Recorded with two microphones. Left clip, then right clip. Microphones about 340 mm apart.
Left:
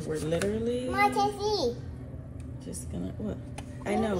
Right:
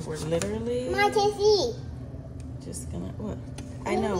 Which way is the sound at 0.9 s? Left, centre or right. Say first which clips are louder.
Right 2 dB; right.